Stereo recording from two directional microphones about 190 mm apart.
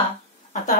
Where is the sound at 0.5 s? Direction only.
40° left (ahead or behind).